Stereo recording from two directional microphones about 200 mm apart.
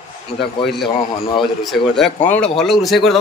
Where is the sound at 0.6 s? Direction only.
Centre (ahead or behind).